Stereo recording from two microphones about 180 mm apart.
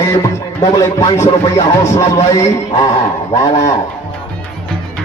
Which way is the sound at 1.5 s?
15° left (ahead or behind).